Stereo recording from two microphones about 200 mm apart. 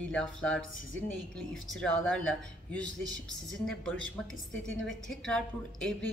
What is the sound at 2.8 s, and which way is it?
Speech, 65° right (ahead or behind).